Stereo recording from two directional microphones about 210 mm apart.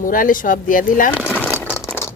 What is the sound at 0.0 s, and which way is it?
Speech, 40° left (ahead or behind).